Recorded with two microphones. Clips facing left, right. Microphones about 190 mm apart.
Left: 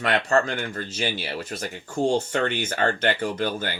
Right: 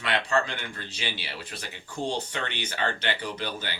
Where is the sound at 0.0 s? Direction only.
45° left (ahead or behind).